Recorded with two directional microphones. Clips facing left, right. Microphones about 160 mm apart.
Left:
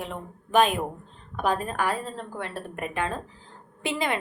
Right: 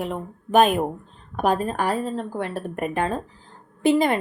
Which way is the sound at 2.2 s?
45° right (ahead or behind).